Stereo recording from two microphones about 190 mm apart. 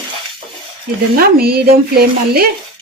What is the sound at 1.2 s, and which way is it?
A woman's voice, 55° right (ahead or behind).